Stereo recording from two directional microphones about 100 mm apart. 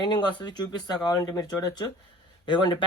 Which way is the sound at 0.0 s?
45° left (ahead or behind).